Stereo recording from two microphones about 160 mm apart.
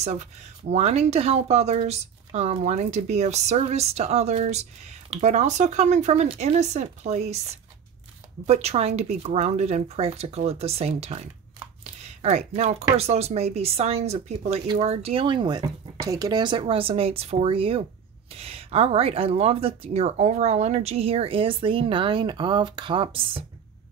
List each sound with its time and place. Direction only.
0.0 s speech: 45° right (ahead or behind)
8.5 s speech: 40° right (ahead or behind)
11.8 s a sound: 40° right (ahead or behind)
12.9 s speech: 40° right (ahead or behind)